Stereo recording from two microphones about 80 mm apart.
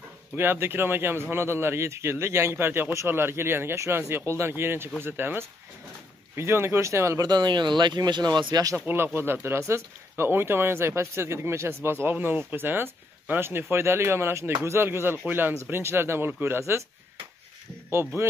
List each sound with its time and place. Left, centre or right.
0.4 s a man's voice: right
7.2 s speech: right
8.7 s a man's voice: right
17.8 s speech: right